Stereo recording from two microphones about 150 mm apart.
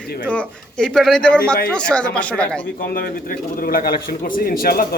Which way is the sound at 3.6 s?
75° left (ahead or behind).